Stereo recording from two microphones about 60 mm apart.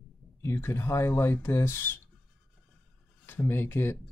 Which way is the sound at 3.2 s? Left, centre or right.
Left.